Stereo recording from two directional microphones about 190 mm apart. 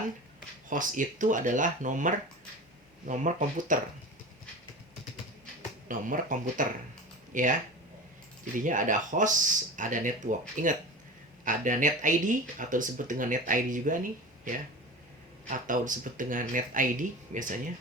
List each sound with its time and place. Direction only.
0.7 s speech: 45° right (ahead or behind)
5.9 s speech: 45° right (ahead or behind)
8.5 s speech: 45° right (ahead or behind)